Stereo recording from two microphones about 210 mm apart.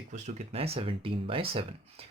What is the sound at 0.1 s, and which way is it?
Speech, 30° right (ahead or behind).